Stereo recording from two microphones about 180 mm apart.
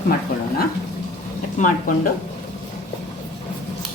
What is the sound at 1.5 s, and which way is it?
Speech, 45° left (ahead or behind).